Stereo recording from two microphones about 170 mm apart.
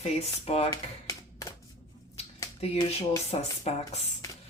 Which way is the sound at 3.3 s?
35° left (ahead or behind).